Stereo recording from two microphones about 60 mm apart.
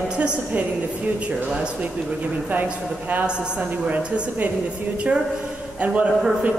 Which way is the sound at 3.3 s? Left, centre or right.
Centre.